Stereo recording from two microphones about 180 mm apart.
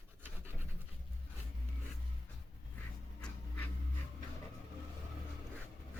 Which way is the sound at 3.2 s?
10° left (ahead or behind).